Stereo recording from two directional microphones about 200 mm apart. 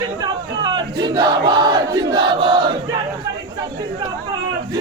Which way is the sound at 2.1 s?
25° right (ahead or behind).